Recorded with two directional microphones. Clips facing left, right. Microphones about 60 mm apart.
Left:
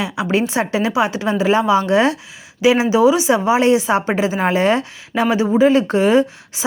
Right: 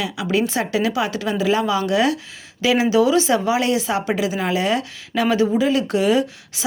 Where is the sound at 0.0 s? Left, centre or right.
Left.